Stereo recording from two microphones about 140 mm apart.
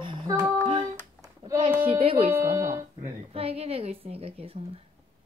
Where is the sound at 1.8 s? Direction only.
40° right (ahead or behind).